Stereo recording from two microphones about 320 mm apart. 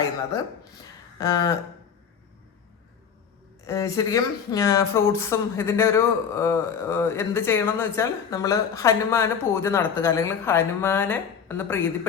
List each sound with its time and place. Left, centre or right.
1.2 s speech: centre
3.7 s speech: centre